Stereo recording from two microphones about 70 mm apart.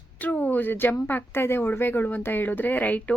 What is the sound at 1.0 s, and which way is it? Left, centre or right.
Speech, left.